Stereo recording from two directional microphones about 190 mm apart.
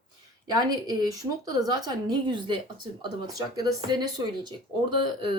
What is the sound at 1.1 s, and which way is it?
A woman's voice, 20° right (ahead or behind).